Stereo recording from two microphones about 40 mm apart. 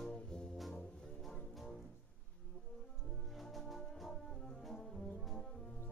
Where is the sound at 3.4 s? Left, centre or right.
Centre.